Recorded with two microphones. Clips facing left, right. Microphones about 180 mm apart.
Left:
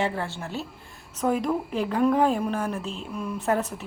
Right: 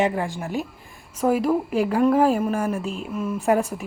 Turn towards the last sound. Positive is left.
turn(degrees=-10)  # may be behind; listen again after turning